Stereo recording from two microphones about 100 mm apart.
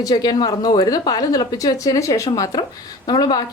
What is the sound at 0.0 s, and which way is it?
Speech, 40° left (ahead or behind).